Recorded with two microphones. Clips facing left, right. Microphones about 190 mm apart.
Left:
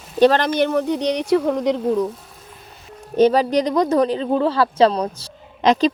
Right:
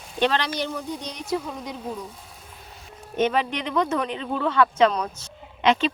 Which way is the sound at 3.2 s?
35° left (ahead or behind).